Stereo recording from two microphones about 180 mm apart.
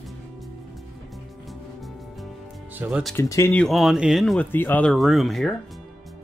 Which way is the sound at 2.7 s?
5° right (ahead or behind).